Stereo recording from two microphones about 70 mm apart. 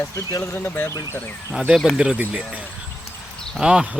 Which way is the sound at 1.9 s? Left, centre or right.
Centre.